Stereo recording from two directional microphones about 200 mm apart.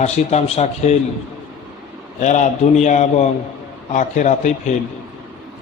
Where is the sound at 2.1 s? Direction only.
40° left (ahead or behind).